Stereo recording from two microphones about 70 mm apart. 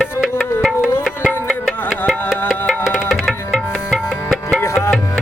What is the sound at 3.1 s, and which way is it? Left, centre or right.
Tabla, centre.